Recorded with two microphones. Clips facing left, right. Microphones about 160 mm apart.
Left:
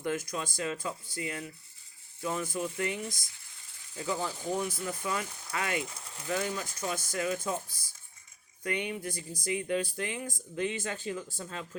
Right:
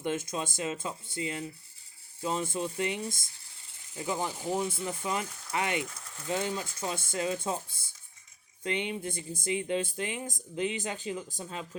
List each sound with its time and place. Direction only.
0.0 s speech: 25° right (ahead or behind)
5.8 s speech: 25° left (ahead or behind)
6.2 s speech: 20° right (ahead or behind)